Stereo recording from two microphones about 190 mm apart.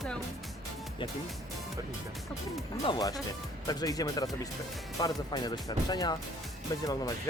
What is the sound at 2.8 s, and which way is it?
Speech, 20° left (ahead or behind).